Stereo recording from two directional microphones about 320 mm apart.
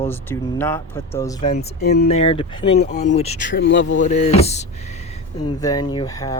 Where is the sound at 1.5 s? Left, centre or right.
Left.